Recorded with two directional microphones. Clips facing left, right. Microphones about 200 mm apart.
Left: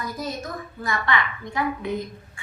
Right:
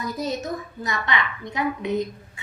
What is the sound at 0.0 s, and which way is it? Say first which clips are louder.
A woman's voice: right 3 dB; 20° right (ahead or behind).